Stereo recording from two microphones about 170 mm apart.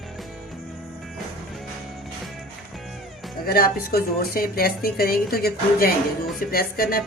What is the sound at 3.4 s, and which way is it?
A woman's voice, 60° left (ahead or behind).